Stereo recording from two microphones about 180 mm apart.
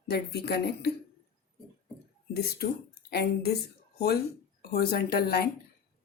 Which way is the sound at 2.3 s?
60° left (ahead or behind).